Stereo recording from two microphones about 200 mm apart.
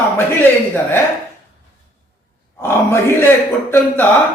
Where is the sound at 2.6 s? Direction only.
10° left (ahead or behind).